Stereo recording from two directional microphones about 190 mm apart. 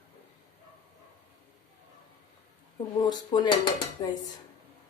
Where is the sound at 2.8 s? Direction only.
20° left (ahead or behind).